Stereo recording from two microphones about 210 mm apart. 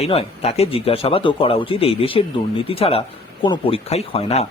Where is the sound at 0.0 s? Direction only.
30° left (ahead or behind).